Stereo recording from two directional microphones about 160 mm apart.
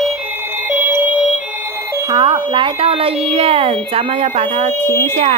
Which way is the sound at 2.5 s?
35° right (ahead or behind).